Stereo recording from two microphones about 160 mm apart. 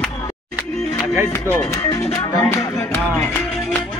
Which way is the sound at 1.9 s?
20° left (ahead or behind).